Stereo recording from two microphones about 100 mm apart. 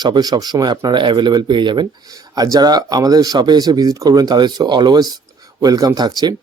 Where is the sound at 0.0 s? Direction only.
45° right (ahead or behind).